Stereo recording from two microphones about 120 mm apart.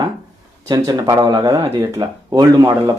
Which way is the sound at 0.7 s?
30° right (ahead or behind).